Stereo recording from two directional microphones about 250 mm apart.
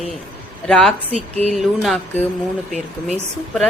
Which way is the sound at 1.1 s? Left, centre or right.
Right.